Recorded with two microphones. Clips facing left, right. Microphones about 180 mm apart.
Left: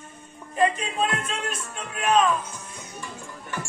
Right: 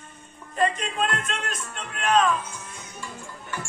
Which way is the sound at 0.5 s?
10° left (ahead or behind).